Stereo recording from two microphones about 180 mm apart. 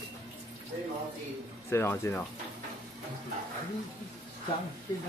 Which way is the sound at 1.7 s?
15° left (ahead or behind).